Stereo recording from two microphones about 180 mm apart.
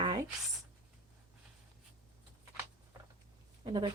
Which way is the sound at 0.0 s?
25° right (ahead or behind).